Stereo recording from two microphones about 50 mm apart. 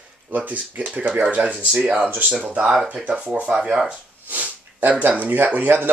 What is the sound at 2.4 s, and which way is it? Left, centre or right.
Speech, right.